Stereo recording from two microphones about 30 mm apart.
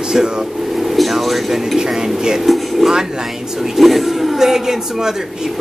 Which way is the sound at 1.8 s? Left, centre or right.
Right.